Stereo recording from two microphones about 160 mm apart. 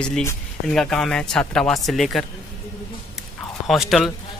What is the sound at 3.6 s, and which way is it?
Speech, centre (ahead or behind).